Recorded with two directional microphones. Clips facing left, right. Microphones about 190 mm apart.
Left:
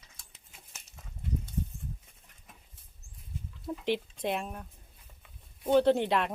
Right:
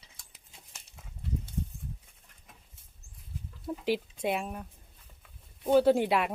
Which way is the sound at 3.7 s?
5° right (ahead or behind).